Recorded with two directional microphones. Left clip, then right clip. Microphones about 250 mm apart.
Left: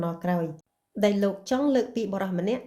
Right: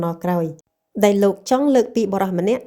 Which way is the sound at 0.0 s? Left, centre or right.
Right.